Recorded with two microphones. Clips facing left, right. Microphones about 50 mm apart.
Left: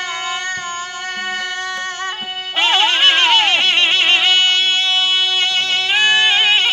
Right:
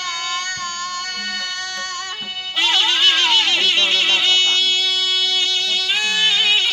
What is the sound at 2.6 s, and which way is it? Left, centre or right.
Music, left.